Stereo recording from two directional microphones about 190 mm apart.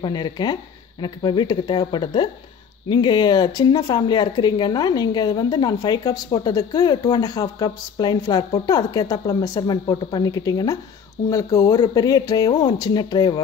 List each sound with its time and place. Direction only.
0.0 s speech: 25° left (ahead or behind)